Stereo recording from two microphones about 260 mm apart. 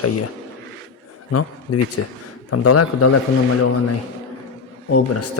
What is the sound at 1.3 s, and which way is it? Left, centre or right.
A man's voice, left.